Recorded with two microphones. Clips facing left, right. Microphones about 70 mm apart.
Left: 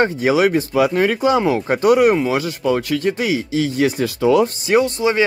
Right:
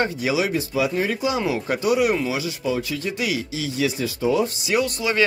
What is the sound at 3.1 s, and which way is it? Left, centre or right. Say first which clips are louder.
Speech: left 7 dB; left.